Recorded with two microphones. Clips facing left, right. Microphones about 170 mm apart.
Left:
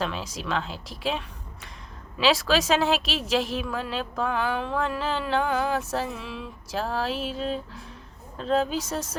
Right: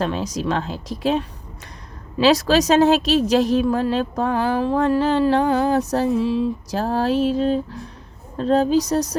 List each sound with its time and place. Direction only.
0.0 s a woman's voice: 40° right (ahead or behind)